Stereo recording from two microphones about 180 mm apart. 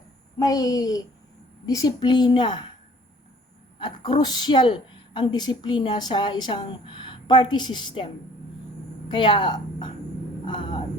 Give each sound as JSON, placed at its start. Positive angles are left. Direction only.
{"t": 0.3, "sound": "a woman's voice", "side_deg": 20}
{"t": 3.8, "sound": "a woman's voice", "side_deg": 25}